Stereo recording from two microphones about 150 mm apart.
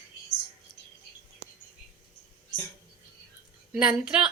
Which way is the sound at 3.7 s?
5° right (ahead or behind).